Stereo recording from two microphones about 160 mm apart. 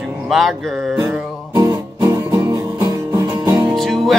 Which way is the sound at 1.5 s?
20° right (ahead or behind).